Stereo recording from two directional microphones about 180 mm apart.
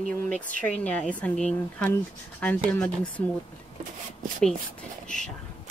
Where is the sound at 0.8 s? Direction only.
5° left (ahead or behind).